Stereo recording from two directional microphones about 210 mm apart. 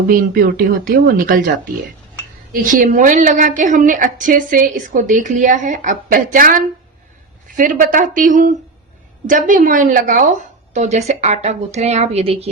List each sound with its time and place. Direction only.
0.1 s a woman's voice: 40° right (ahead or behind)